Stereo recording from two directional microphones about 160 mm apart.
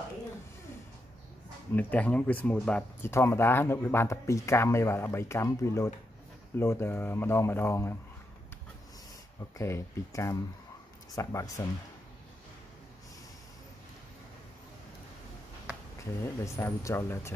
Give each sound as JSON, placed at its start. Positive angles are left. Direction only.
{"t": 1.7, "sound": "speech", "side_deg": 10}
{"t": 9.6, "sound": "speech", "side_deg": 15}
{"t": 16.0, "sound": "speech", "side_deg": 20}